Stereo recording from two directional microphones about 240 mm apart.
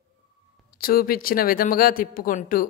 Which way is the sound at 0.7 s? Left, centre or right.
Left.